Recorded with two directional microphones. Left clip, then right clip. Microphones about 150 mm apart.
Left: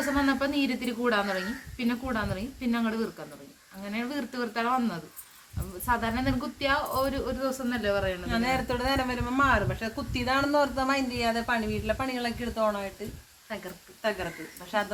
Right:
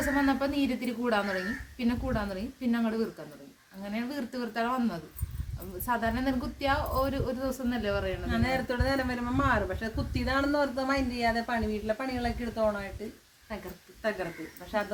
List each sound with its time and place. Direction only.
0.2 s a woman's voice: 10° right (ahead or behind)
8.3 s speech: 20° left (ahead or behind)
14.0 s speech: 20° left (ahead or behind)